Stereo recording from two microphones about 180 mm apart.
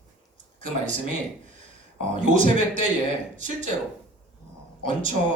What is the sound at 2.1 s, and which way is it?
A man's voice, 45° right (ahead or behind).